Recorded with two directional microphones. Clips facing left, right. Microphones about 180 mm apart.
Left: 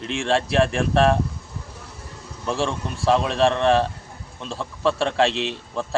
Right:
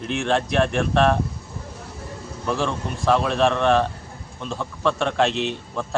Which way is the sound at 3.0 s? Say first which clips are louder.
Even; 30° left (ahead or behind).